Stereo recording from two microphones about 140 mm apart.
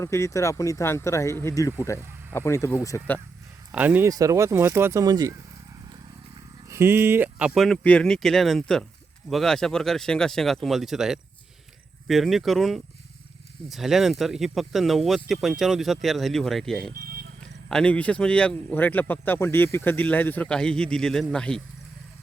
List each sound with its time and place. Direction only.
0.0 s speech: 20° left (ahead or behind)
3.7 s speech: 10° right (ahead or behind)
4.1 s speech: 25° right (ahead or behind)
6.7 s a man's voice: 20° right (ahead or behind); by 21.6 s 5° left (ahead or behind)